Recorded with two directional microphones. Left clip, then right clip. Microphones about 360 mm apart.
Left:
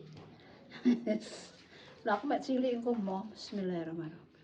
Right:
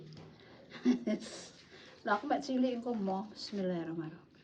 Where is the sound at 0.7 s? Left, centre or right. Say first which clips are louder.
Left 1 dB; centre.